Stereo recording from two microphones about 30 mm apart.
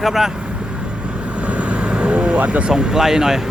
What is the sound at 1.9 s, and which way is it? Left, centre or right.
Speech, right.